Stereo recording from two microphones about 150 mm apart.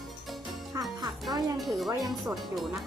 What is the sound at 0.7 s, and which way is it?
Music, 25° right (ahead or behind).